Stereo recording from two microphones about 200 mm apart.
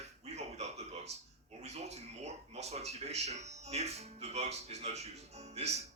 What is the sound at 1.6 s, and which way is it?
Speech, 35° right (ahead or behind).